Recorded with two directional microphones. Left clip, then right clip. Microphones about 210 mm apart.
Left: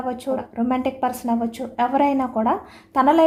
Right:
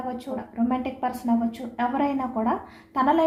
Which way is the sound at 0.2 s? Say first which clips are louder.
Left 5 dB; 50° left (ahead or behind).